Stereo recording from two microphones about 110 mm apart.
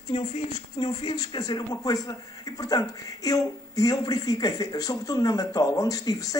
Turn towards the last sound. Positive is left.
turn(degrees=30)  # may be behind; listen again after turning